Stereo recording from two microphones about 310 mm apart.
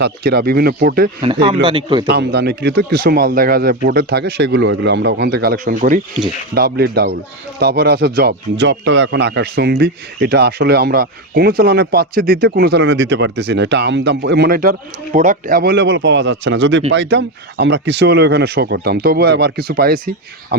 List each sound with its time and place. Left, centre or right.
0.0 s speech: right
1.2 s a man's voice: centre
2.0 s speech: right